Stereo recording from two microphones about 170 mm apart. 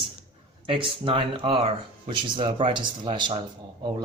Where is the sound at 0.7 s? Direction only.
30° right (ahead or behind).